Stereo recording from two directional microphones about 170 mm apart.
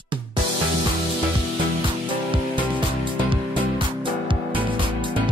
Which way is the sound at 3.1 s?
30° right (ahead or behind).